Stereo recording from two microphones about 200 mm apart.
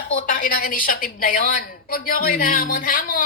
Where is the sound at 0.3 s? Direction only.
45° left (ahead or behind).